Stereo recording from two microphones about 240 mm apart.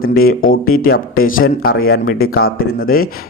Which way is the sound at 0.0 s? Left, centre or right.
Left.